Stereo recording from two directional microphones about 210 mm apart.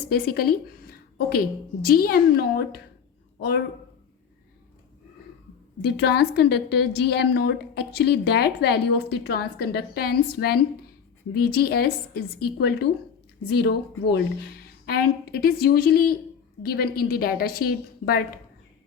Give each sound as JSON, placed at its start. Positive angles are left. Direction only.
{"t": 0.1, "sound": "a woman's voice", "side_deg": 45}
{"t": 5.8, "sound": "a woman's voice", "side_deg": 50}